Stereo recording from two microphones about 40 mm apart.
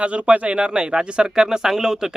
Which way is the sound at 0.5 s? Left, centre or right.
Right.